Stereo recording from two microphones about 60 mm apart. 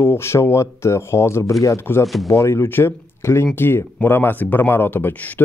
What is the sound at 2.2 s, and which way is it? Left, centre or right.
Speech, left.